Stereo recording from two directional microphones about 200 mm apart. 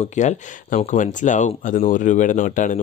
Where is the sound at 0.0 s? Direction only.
35° left (ahead or behind).